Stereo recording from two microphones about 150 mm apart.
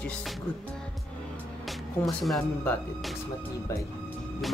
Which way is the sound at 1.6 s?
Centre (ahead or behind).